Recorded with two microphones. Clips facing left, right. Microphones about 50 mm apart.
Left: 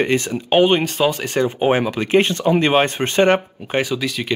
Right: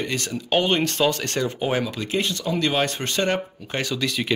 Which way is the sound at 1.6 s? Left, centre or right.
Left.